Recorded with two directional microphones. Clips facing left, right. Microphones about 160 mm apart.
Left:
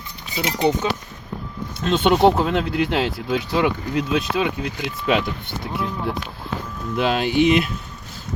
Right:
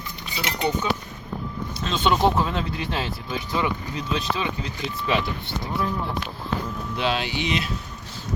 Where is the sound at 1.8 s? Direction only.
60° left (ahead or behind).